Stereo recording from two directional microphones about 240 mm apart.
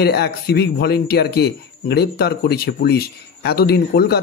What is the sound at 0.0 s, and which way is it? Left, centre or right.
A man's voice, left.